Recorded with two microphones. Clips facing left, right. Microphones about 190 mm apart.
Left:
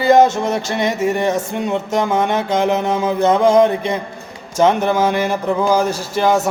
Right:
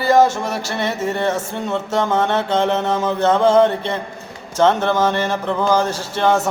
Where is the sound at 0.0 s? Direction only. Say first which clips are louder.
Left 3 dB; 20° left (ahead or behind).